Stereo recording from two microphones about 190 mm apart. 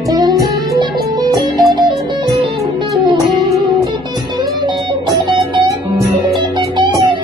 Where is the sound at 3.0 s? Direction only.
25° right (ahead or behind).